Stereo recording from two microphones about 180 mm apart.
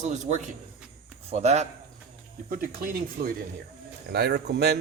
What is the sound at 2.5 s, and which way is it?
Speech, 55° right (ahead or behind).